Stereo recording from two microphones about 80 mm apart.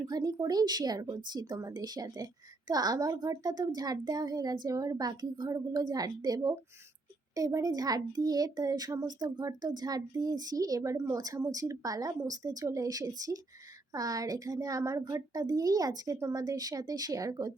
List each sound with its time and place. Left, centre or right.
0.0 s a child's voice: right
11.2 s a child's voice: right